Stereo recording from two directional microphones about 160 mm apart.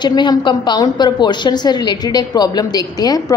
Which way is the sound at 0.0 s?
25° left (ahead or behind).